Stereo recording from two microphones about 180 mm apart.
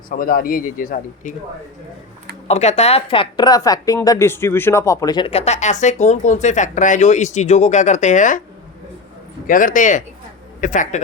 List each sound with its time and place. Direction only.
0.1 s a man's voice: 55° left (ahead or behind)
2.5 s speech: 35° left (ahead or behind)
9.5 s a man's voice: 45° left (ahead or behind)